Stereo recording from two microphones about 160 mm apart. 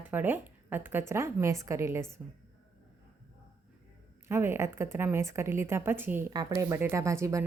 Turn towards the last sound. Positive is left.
turn(degrees=-20)  # may be behind; listen again after turning